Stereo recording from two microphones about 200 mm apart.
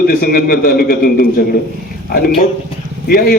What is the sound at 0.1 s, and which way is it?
A man's voice, 45° left (ahead or behind).